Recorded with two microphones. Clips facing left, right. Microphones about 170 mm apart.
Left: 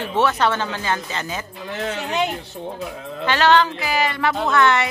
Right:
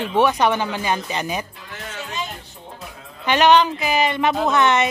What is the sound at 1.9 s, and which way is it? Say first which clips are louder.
Music: left 7 dB; 70° left (ahead or behind).